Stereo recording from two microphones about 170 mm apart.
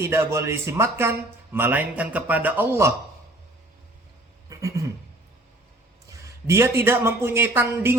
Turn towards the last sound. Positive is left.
turn(degrees=-15)  # may be behind; listen again after turning